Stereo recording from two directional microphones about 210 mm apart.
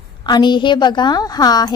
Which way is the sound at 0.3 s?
20° left (ahead or behind).